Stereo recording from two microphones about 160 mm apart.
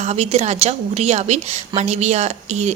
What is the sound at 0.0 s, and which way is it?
A woman's voice, 40° right (ahead or behind).